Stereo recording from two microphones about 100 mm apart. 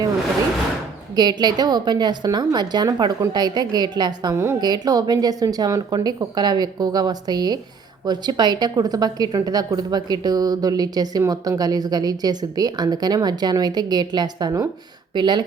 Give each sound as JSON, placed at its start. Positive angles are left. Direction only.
{"t": 1.1, "sound": "a woman's voice", "side_deg": -45}